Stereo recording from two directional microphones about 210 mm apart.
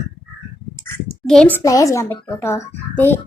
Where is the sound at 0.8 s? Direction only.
5° left (ahead or behind).